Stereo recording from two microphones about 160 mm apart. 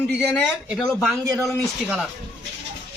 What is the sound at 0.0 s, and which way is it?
Speech, 10° left (ahead or behind).